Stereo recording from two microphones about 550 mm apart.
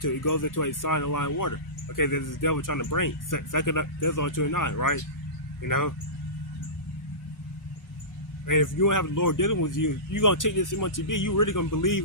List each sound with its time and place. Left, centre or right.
0.0 s speech: left
8.4 s speech: left